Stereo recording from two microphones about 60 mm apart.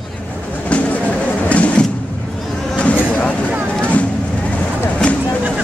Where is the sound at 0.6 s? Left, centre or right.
Left.